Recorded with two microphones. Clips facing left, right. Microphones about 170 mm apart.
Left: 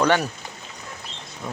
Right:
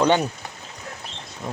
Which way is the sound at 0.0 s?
20° right (ahead or behind).